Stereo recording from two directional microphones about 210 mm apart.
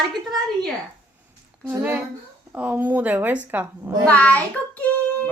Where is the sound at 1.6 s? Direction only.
10° right (ahead or behind).